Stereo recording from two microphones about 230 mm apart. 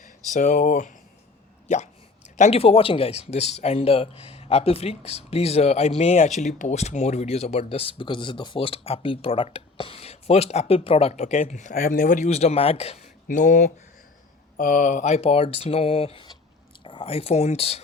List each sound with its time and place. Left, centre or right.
0.3 s speech: left